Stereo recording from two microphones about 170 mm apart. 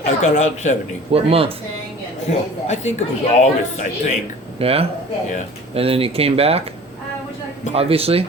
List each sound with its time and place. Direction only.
0.2 s speech: 45° left (ahead or behind)
1.1 s speech: 35° right (ahead or behind)
2.3 s speech: 40° left (ahead or behind)
4.6 s speech: 35° right (ahead or behind)
7.7 s speech: 35° right (ahead or behind)